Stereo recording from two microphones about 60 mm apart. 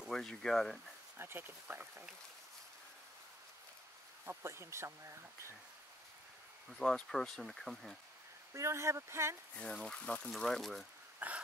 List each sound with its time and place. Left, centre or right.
0.1 s speech: centre
1.1 s speech: right
4.3 s speech: right
6.8 s speech: centre
8.5 s speech: right
9.6 s speech: centre
10.3 s speech: centre
11.1 s bee: right